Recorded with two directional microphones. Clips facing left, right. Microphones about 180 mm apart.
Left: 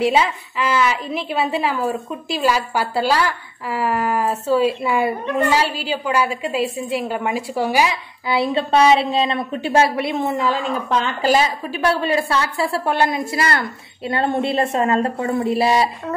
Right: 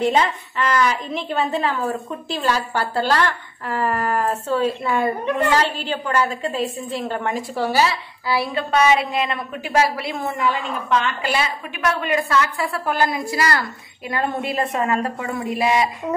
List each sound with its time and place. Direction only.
0.0 s a woman's voice: 10° left (ahead or behind)
10.5 s a woman's voice: 35° left (ahead or behind)